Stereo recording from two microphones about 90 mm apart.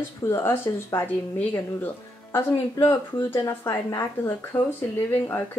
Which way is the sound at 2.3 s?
35° left (ahead or behind).